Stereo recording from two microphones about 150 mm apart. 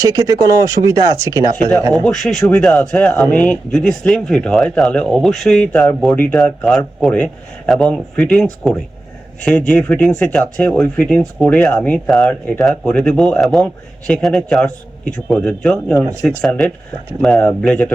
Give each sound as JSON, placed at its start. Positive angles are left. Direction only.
{"t": 0.0, "sound": "speech", "side_deg": -25}
{"t": 2.0, "sound": "speech", "side_deg": 0}